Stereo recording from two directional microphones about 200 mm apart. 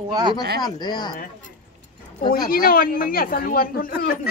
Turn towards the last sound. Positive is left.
turn(degrees=45)  # may be behind; listen again after turning